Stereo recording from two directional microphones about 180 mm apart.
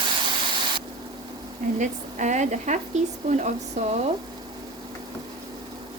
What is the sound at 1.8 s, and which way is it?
Speech, 40° right (ahead or behind).